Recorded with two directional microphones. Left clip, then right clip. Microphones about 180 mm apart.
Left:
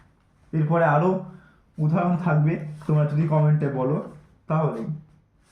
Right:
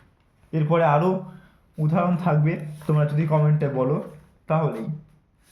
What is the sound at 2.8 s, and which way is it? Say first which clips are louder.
Speech: right 1 dB; 50° right (ahead or behind).